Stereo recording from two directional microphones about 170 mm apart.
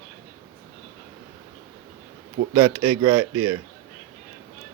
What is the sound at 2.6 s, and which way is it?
Speech, 30° right (ahead or behind).